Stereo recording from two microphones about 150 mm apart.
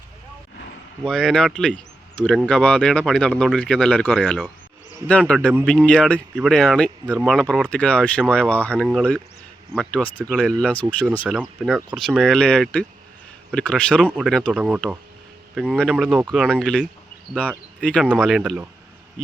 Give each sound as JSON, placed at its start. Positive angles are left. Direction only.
{"t": 1.0, "sound": "speech", "side_deg": 5}
{"t": 11.3, "sound": "speech", "side_deg": -5}